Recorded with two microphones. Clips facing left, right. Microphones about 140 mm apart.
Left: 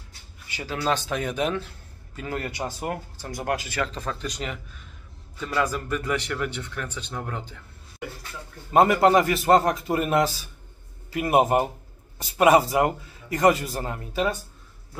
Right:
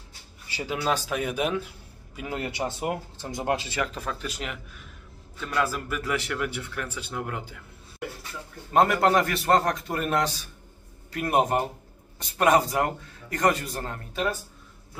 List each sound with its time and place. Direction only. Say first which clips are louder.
0.6 s a man's voice: left 1 dB; 10° right (ahead or behind); by 3.8 s 25° right (ahead or behind)
3.8 s speech: left 1 dB; 5° right (ahead or behind)